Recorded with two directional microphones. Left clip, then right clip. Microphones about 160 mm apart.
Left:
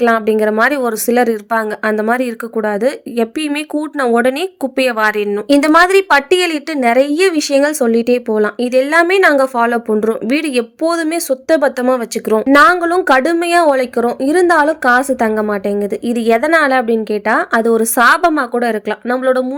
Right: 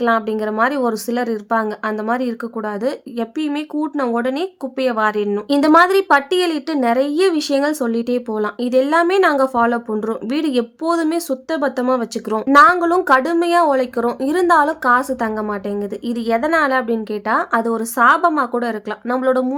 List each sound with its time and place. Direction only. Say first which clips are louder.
0.0 s a woman's voice: left 6 dB; 25° left (ahead or behind)